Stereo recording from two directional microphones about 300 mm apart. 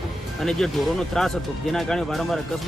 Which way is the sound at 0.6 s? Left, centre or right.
Centre.